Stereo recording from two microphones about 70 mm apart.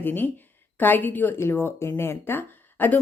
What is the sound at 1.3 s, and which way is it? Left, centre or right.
Speech, left.